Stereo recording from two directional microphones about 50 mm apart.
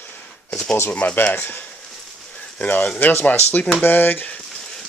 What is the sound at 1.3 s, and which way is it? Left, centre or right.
Speech, left.